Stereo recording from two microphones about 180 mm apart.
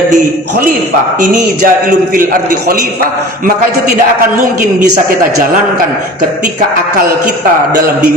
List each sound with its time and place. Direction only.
1.3 s a man's voice: 50° right (ahead or behind)